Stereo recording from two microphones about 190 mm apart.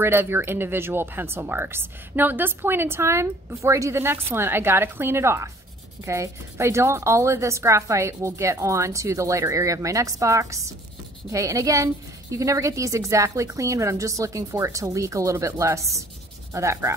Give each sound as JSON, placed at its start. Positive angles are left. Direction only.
{"t": 0.0, "sound": "speech", "side_deg": -10}